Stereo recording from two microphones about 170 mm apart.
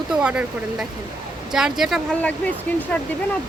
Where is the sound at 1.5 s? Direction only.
5° right (ahead or behind).